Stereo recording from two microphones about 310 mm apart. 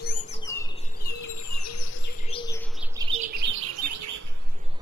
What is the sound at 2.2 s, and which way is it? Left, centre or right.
Bird, centre.